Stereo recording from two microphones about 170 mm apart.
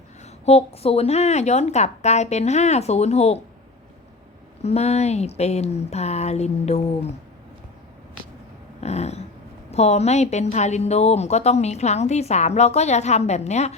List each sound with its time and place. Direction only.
0.4 s a woman's voice: 35° left (ahead or behind)
4.6 s a woman's voice: 40° left (ahead or behind)
8.8 s dog: 40° left (ahead or behind)
9.6 s a woman's voice: 40° left (ahead or behind)